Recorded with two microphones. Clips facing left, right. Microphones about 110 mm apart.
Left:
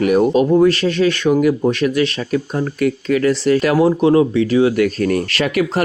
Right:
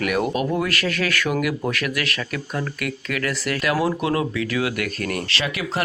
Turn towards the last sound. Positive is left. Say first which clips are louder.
# left 8 dB
turn(degrees=45)  # may be behind; listen again after turning